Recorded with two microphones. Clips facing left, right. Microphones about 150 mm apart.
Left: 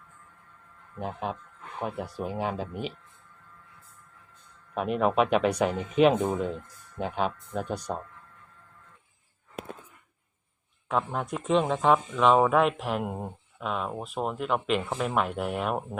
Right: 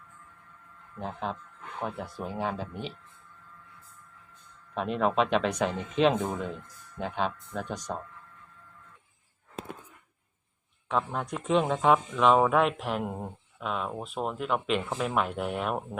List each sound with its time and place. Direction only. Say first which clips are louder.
0.9 s speech: left 1 dB; 15° left (ahead or behind)
4.7 s speech: left 2 dB; 10° left (ahead or behind)
10.8 s speech: left 1 dB; 5° left (ahead or behind)